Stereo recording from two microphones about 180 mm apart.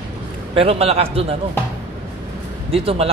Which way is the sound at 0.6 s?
35° right (ahead or behind).